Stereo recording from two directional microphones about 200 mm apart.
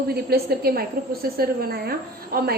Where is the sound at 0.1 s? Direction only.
50° right (ahead or behind).